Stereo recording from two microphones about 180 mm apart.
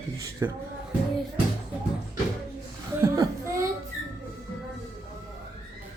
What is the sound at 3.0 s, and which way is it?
Whimper, 15° right (ahead or behind).